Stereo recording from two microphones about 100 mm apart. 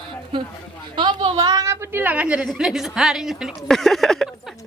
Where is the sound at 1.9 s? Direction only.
15° right (ahead or behind); by 4.2 s 5° left (ahead or behind).